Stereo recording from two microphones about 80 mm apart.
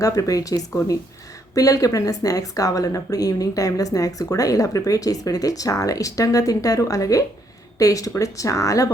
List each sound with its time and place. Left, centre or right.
0.0 s speech: left